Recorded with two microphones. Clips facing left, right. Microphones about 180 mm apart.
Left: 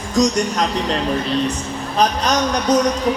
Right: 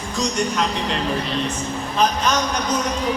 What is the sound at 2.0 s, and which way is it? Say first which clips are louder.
Speech: left 3 dB; 40° left (ahead or behind).